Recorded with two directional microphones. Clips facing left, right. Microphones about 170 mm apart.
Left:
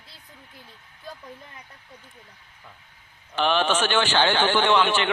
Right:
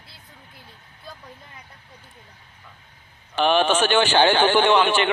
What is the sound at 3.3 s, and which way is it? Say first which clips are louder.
A man's voice: right 3 dB; 15° right (ahead or behind).